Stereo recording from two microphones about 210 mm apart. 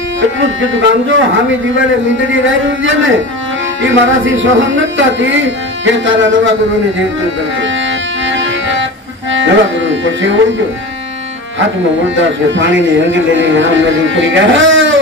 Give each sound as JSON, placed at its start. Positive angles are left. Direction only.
{"t": 0.7, "sound": "music", "side_deg": -65}
{"t": 8.3, "sound": "music", "side_deg": -60}
{"t": 9.3, "sound": "speech", "side_deg": -60}
{"t": 12.2, "sound": "music", "side_deg": -60}